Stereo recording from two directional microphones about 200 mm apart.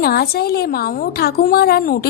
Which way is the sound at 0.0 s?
50° left (ahead or behind).